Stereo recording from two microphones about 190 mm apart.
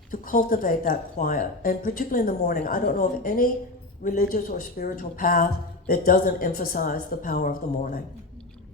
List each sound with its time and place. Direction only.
0.1 s speech: 45° left (ahead or behind)